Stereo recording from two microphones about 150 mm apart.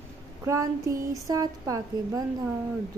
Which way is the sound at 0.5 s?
20° right (ahead or behind).